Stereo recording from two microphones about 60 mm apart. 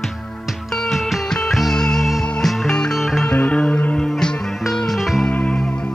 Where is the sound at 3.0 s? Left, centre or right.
Centre.